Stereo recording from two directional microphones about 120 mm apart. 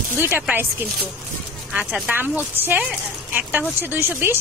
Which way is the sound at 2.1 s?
15° right (ahead or behind).